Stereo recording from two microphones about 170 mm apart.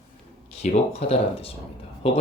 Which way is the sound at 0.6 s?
40° left (ahead or behind).